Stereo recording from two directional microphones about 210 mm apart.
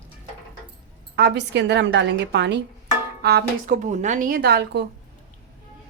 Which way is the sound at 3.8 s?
35° right (ahead or behind).